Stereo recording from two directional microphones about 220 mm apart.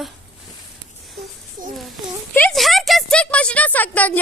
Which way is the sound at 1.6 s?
40° right (ahead or behind).